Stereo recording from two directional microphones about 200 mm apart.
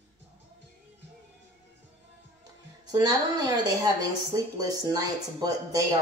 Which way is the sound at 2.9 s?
20° right (ahead or behind).